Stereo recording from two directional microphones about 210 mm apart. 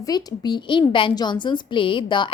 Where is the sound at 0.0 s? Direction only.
20° left (ahead or behind).